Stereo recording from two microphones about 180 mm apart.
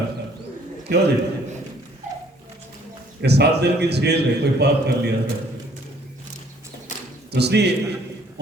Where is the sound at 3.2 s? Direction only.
65° right (ahead or behind).